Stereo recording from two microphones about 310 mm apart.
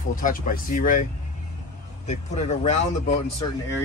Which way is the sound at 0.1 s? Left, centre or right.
Left.